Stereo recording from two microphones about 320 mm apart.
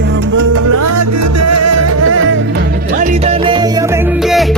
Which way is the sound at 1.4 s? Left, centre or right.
Right.